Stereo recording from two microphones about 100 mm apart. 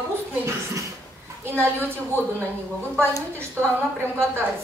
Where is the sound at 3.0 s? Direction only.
25° right (ahead or behind).